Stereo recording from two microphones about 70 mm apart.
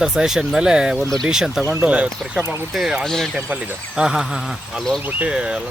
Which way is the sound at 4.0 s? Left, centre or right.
Centre.